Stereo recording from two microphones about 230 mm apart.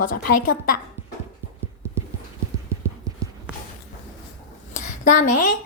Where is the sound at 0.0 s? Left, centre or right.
Left.